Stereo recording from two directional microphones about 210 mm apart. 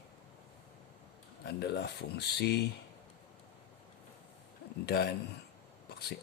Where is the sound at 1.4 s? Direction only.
50° left (ahead or behind).